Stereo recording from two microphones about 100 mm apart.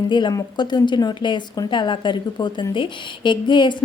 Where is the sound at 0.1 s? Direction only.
50° left (ahead or behind).